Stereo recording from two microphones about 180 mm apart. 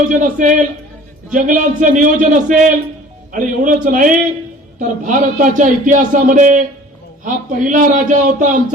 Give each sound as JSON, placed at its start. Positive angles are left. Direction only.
{"t": 0.1, "sound": "a man's voice", "side_deg": -45}